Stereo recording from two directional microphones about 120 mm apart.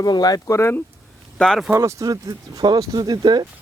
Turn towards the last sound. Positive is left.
turn(degrees=-35)  # may be behind; listen again after turning